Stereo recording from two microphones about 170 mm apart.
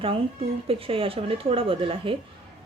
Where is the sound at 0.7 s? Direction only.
35° right (ahead or behind).